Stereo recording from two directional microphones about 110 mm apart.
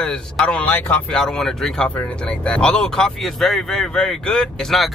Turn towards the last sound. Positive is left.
turn(degrees=5)  # may be behind; listen again after turning